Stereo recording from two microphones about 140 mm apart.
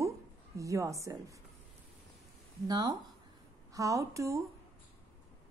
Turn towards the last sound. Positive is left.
turn(degrees=-20)  # may be behind; listen again after turning